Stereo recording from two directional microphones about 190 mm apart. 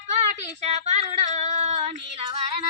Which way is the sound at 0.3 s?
35° right (ahead or behind).